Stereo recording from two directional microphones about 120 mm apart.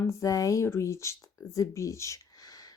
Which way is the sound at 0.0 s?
25° left (ahead or behind).